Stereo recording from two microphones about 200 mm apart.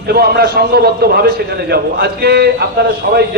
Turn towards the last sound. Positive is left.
turn(degrees=-50)  # may be behind; listen again after turning